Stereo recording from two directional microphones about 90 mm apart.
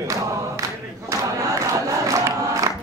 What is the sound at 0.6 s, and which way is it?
Crowd, 35° right (ahead or behind).